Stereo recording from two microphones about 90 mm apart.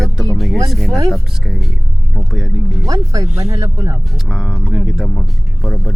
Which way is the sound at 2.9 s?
40° right (ahead or behind).